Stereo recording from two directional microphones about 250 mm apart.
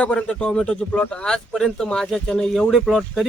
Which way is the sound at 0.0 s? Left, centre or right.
Centre.